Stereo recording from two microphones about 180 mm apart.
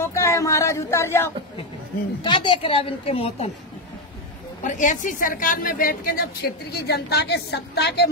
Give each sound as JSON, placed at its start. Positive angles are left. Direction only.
{"t": 0.0, "sound": "speech", "side_deg": 15}
{"t": 2.2, "sound": "a woman's voice", "side_deg": 25}
{"t": 4.6, "sound": "a woman's voice", "side_deg": 45}